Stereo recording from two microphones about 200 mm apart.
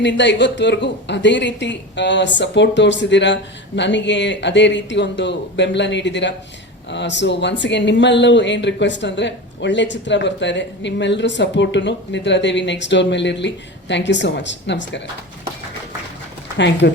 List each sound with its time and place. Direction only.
0.0 s speech: 60° left (ahead or behind)
16.6 s speech: 60° left (ahead or behind)